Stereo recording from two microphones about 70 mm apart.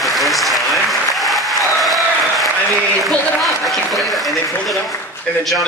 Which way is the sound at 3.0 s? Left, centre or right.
Centre.